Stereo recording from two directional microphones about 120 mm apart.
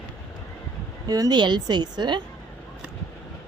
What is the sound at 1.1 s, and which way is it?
Speech, 35° right (ahead or behind).